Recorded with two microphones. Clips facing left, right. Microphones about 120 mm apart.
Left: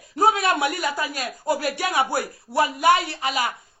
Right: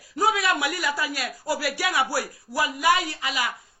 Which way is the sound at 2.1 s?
25° left (ahead or behind).